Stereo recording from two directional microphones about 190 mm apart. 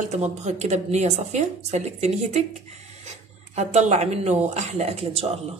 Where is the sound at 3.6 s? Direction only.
35° right (ahead or behind).